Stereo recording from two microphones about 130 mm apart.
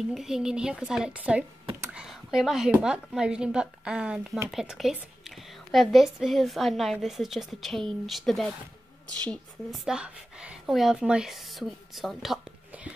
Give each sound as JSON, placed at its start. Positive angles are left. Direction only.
{"t": 0.1, "sound": "a woman's voice", "side_deg": -5}
{"t": 9.7, "sound": "a woman's voice", "side_deg": -5}